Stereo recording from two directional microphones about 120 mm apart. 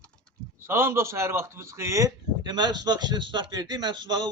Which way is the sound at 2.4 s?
35° right (ahead or behind).